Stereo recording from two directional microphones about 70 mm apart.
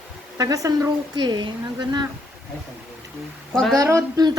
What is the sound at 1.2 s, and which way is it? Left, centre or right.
Speech, right.